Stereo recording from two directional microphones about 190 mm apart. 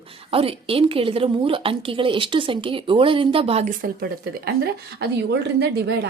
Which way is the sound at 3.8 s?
50° right (ahead or behind).